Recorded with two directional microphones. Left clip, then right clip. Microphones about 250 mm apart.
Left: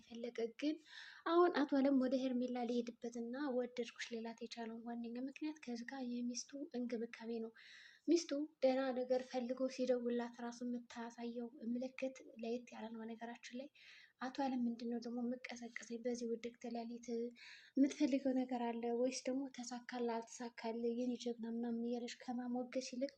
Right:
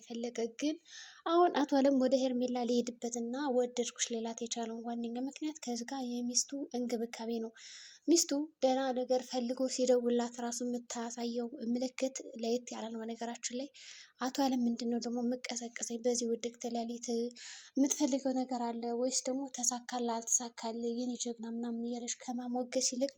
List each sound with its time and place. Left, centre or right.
0.1 s a woman's voice: right